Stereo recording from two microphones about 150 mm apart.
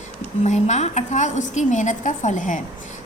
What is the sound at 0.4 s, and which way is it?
A woman's voice, 50° left (ahead or behind).